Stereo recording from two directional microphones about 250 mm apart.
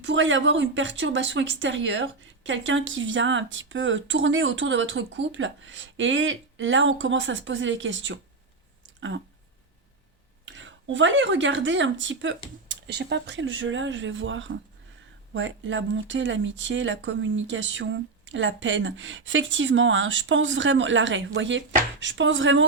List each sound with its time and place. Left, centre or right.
0.0 s speech: right
9.0 s a sound: right
10.4 s speech: right